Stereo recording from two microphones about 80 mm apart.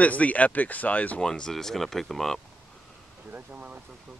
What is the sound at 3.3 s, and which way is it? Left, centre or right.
Speech, centre.